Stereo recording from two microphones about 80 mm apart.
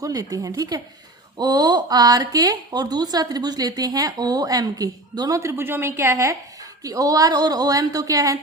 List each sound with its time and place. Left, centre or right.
0.0 s a woman's voice: right
5.4 s speech: right
5.9 s speech: right
6.8 s a woman's voice: right